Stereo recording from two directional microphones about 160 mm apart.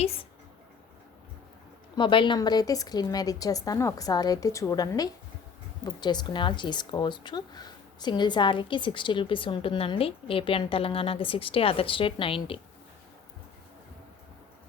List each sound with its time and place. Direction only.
2.0 s a woman's voice: 30° left (ahead or behind)